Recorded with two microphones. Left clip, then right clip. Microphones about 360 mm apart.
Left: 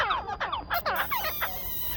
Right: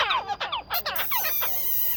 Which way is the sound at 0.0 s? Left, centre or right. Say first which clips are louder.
Right 3 dB; centre.